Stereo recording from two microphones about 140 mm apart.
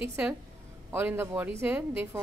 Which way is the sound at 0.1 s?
20° right (ahead or behind).